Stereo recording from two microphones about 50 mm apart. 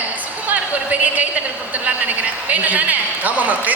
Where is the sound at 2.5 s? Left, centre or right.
Right.